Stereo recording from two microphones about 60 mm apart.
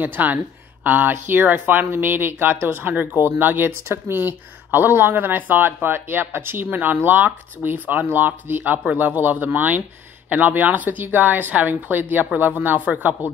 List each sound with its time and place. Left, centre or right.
0.0 s speech: right